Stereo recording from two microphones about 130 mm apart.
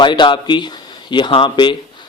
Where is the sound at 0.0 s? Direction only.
35° left (ahead or behind).